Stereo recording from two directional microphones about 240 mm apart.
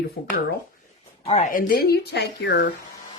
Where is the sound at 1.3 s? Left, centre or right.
Left.